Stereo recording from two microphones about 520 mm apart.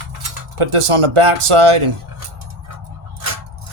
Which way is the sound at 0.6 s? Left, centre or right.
Right.